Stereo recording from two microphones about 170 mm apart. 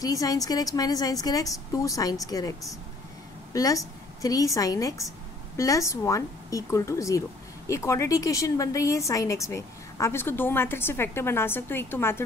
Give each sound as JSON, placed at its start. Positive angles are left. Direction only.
{"t": 0.0, "sound": "a woman's voice", "side_deg": 20}
{"t": 3.5, "sound": "a woman's voice", "side_deg": 20}